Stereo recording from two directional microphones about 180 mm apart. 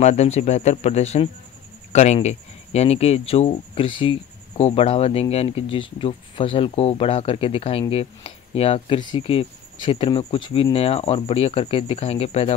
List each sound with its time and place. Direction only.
0.0 s speech: 40° left (ahead or behind)